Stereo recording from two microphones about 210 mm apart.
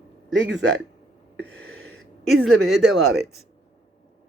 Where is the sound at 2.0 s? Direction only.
Centre (ahead or behind).